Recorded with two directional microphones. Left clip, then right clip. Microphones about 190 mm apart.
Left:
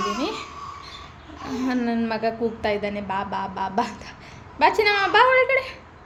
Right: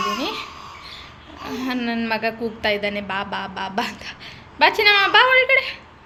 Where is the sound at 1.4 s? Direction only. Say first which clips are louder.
Even; 10° left (ahead or behind).